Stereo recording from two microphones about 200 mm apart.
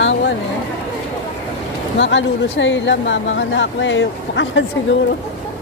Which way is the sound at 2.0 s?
65° left (ahead or behind).